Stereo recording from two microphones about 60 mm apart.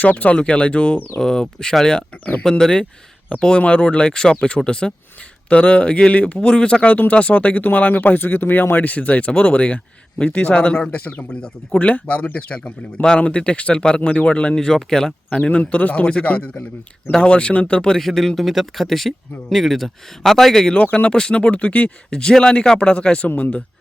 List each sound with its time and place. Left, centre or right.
0.0 s speech: left
1.2 s speech: centre
15.4 s speech: left
17.7 s speech: centre
20.7 s speech: left
22.1 s speech: centre